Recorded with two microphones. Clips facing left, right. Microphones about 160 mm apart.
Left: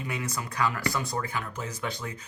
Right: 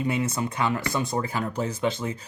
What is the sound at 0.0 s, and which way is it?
Speech, 25° right (ahead or behind).